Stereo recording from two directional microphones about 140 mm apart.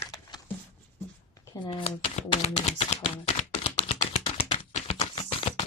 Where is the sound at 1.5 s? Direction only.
35° left (ahead or behind).